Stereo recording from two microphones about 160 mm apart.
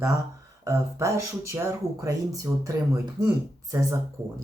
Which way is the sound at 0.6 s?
20° right (ahead or behind).